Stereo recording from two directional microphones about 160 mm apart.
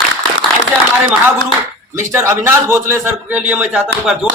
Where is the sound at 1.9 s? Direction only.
15° right (ahead or behind).